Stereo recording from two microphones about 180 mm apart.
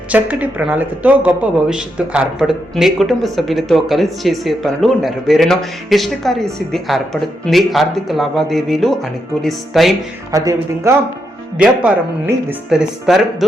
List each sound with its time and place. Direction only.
0.1 s a woman's voice: 10° right (ahead or behind)
10.3 s speech: 20° right (ahead or behind)
11.5 s a woman's voice: 5° right (ahead or behind)